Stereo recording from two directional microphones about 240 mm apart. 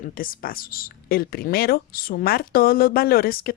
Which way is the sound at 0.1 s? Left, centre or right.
Left.